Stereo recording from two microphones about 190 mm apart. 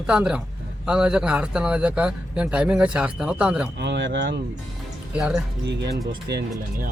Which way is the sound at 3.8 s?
65° right (ahead or behind).